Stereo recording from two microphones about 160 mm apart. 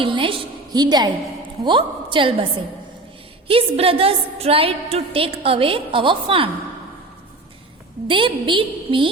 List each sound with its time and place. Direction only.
0.0 s a sound: 30° right (ahead or behind)
1.6 s a woman's voice: 30° right (ahead or behind)
8.0 s a woman's voice: 30° right (ahead or behind)